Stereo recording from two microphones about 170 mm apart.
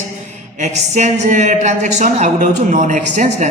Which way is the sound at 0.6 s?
45° right (ahead or behind).